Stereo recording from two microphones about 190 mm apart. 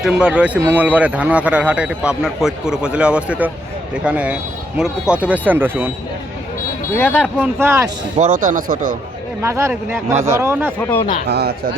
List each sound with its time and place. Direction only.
0.0 s speech: 5° right (ahead or behind)
6.9 s speech: 10° left (ahead or behind)
7.2 s speech: 10° right (ahead or behind)
8.2 s speech: 45° right (ahead or behind)
9.4 s speech: 15° right (ahead or behind)
10.8 s speech: 10° left (ahead or behind)
11.3 s speech: 60° right (ahead or behind)